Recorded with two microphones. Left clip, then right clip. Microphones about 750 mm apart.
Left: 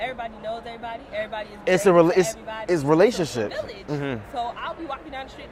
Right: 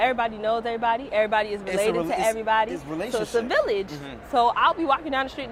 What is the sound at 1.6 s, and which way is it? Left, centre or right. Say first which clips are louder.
Speech: left 7 dB; left.